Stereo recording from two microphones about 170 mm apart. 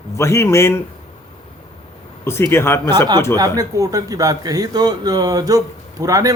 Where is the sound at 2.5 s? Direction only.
15° left (ahead or behind).